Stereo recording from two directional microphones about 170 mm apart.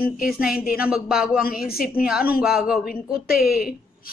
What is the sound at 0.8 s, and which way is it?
Speech, 5° right (ahead or behind).